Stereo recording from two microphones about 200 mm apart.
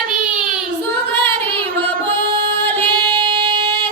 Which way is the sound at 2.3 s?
25° right (ahead or behind).